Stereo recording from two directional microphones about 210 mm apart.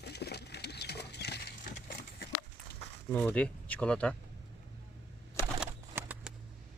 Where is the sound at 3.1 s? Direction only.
5° left (ahead or behind).